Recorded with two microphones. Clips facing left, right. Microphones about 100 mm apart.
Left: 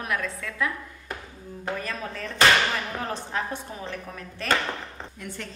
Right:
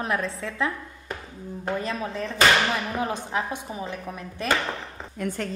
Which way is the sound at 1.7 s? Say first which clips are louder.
Right 4 dB; 20° right (ahead or behind).